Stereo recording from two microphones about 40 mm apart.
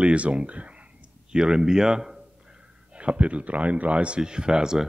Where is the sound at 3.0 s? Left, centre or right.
Right.